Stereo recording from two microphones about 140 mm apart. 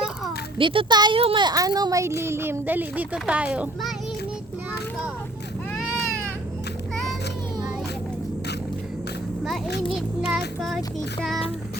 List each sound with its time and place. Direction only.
0.6 s speech: 40° right (ahead or behind); by 3.9 s 10° right (ahead or behind)
9.9 s a child's voice: 5° right (ahead or behind)
10.6 s child singing: centre (ahead or behind)